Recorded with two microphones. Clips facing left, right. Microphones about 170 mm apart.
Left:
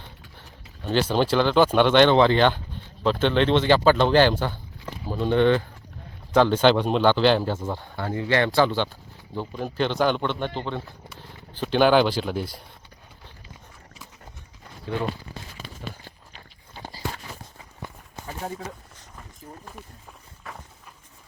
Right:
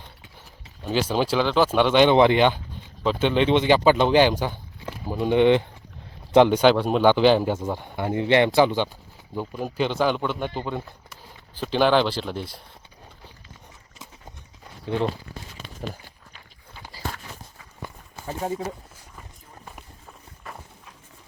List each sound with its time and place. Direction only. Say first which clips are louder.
0.9 s speech: left 1 dB; 5° right (ahead or behind)
2.1 s speech: right 1 dB; 15° right (ahead or behind)
11.6 s speech: left 1 dB; centre (ahead or behind)
16.3 s a sound: left 3 dB; 35° left (ahead or behind)